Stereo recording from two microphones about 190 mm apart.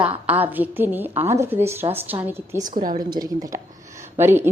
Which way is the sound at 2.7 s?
45° right (ahead or behind).